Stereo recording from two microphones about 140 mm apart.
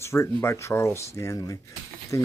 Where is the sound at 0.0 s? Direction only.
20° left (ahead or behind).